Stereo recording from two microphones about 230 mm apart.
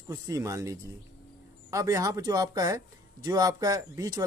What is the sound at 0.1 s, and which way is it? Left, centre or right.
Speech, centre.